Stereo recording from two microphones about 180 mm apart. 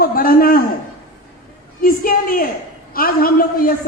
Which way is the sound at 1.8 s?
55° left (ahead or behind).